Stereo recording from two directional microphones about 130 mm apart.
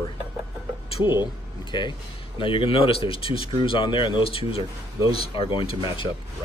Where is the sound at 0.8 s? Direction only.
50° left (ahead or behind).